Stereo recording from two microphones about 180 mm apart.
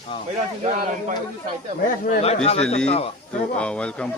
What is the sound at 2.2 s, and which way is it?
Speech, 35° left (ahead or behind).